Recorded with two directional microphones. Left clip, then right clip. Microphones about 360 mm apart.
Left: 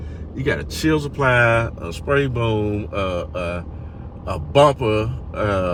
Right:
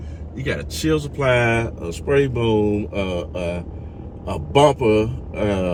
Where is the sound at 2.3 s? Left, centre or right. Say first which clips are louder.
Right 3 dB; left.